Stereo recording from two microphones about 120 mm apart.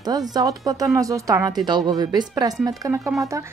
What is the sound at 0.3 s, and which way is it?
Speech, 30° right (ahead or behind).